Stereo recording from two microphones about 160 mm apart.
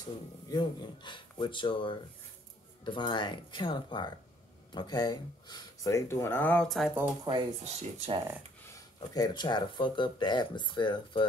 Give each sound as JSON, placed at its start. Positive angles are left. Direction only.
{"t": 0.0, "sound": "speech", "side_deg": 25}
{"t": 7.2, "sound": "speech", "side_deg": -35}
{"t": 9.1, "sound": "speech", "side_deg": 25}